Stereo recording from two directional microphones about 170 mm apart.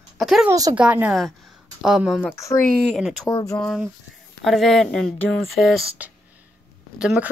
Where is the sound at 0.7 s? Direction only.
10° right (ahead or behind).